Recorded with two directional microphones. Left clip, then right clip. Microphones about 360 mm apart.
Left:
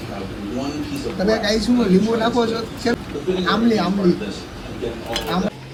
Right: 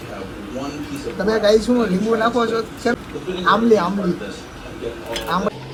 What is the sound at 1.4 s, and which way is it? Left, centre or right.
Speech, centre.